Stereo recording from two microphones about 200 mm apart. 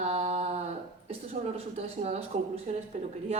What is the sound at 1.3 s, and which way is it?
Speech, 30° right (ahead or behind).